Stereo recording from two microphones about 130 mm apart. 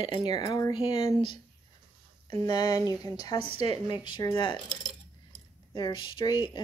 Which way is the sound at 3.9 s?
35° left (ahead or behind).